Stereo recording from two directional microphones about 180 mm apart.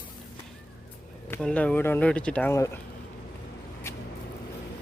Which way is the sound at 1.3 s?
5° left (ahead or behind).